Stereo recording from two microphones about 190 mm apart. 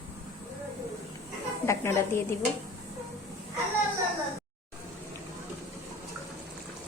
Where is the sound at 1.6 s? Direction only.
15° left (ahead or behind).